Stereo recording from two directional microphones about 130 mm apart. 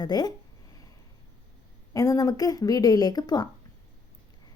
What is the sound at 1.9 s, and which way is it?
Speech, 25° left (ahead or behind).